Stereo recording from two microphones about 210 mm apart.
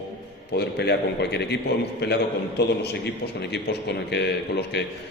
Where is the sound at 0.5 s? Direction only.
50° left (ahead or behind).